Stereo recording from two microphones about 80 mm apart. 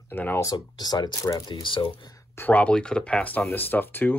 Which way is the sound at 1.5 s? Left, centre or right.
Left.